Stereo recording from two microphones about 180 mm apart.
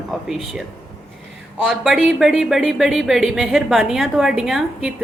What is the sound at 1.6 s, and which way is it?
Speech, centre (ahead or behind).